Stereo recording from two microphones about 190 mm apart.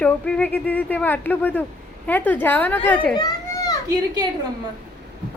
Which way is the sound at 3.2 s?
20° left (ahead or behind).